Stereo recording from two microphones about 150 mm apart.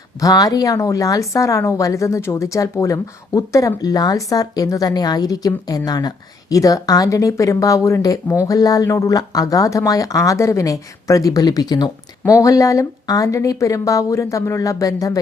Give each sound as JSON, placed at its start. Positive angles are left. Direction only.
{"t": 0.2, "sound": "a woman's voice", "side_deg": 25}